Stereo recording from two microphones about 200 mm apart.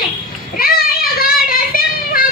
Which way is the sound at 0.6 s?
45° left (ahead or behind).